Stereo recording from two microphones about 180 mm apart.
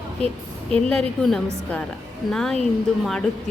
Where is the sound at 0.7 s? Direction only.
5° left (ahead or behind).